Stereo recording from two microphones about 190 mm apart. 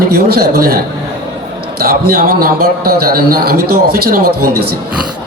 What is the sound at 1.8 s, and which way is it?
A man's voice, 55° right (ahead or behind).